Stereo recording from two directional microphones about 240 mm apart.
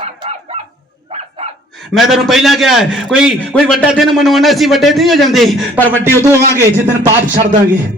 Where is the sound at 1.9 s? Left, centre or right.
Centre.